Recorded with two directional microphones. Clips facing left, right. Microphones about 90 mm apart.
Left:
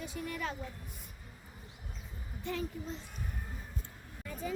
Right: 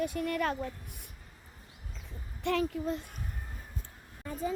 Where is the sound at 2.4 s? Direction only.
70° right (ahead or behind).